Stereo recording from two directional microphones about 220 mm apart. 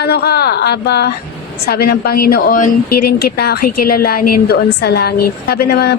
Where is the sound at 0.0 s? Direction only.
45° left (ahead or behind).